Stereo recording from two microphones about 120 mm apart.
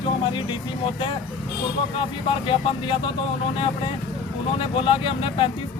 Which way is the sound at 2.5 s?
45° left (ahead or behind).